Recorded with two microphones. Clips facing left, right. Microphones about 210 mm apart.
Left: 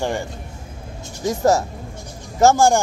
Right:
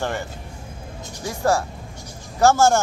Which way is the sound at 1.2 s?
20° left (ahead or behind).